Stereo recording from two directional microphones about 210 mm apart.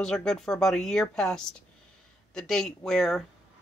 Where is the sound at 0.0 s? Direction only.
5° left (ahead or behind).